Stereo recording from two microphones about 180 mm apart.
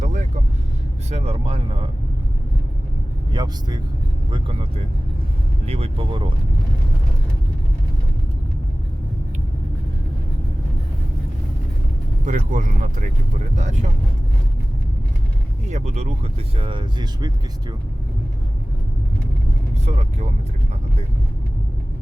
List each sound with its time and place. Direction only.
0.0 s vehicle: 45° right (ahead or behind)
1.1 s speech: 35° right (ahead or behind)
3.3 s speech: 20° right (ahead or behind)
12.2 s speech: 45° right (ahead or behind)
15.7 s speech: 40° right (ahead or behind); by 17.7 s 25° right (ahead or behind)
19.7 s speech: 40° right (ahead or behind)